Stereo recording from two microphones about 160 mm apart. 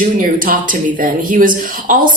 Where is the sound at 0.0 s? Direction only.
55° right (ahead or behind).